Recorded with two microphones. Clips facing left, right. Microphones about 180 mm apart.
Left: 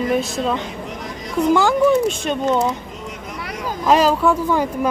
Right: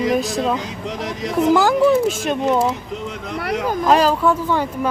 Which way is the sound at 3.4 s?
65° right (ahead or behind).